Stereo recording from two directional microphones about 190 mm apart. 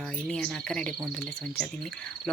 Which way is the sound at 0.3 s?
5° left (ahead or behind).